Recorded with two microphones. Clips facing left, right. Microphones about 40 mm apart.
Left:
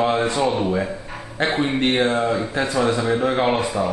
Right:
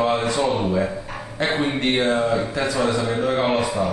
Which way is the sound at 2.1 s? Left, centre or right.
Centre.